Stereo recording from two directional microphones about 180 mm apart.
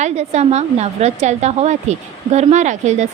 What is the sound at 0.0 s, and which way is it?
A woman's voice, 35° right (ahead or behind).